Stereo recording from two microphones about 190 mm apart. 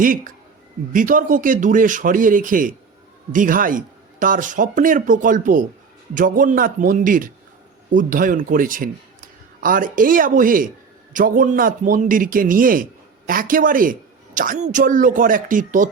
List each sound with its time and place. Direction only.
0.0 s a man's voice: 45° right (ahead or behind)